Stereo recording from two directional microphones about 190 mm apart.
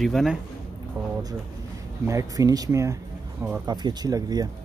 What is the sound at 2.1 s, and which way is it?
Speech, 15° right (ahead or behind).